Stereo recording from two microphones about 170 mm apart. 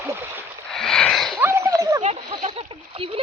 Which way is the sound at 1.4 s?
15° right (ahead or behind).